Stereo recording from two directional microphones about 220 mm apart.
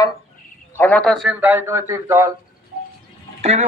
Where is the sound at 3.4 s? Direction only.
30° right (ahead or behind).